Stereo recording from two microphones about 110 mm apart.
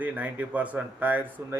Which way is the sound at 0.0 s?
15° right (ahead or behind).